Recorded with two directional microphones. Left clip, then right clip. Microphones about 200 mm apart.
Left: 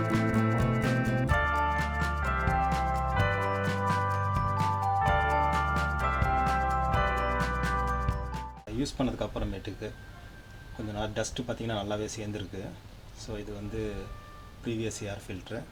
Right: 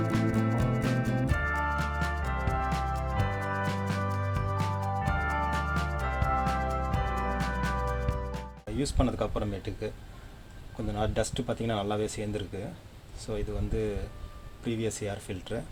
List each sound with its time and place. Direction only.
0.0 s music: centre (ahead or behind)
8.8 s speech: 40° right (ahead or behind)
10.9 s speech: 45° right (ahead or behind)
14.6 s speech: 45° right (ahead or behind)